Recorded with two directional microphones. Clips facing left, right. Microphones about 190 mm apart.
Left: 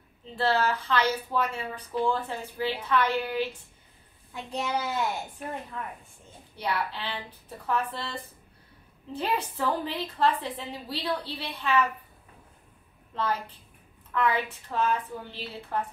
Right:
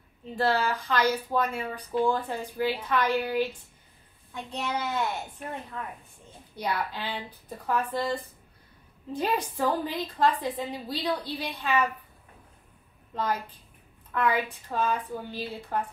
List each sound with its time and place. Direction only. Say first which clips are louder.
0.4 s speech: even; 10° right (ahead or behind)
4.3 s a child's voice: left 1 dB; 10° left (ahead or behind)
6.5 s speech: even; 15° right (ahead or behind)
13.1 s a woman's voice: even; 10° right (ahead or behind)